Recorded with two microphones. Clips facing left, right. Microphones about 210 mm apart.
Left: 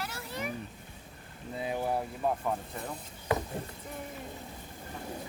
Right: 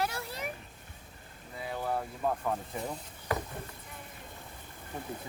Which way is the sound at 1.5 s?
20° left (ahead or behind).